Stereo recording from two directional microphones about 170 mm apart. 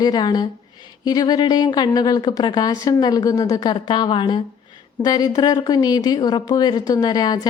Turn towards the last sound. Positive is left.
turn(degrees=25)  # may be behind; listen again after turning